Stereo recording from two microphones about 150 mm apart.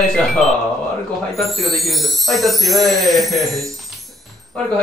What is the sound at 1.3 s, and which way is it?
Speech, centre (ahead or behind).